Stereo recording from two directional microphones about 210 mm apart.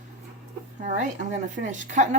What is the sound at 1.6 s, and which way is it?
Speech, 35° right (ahead or behind).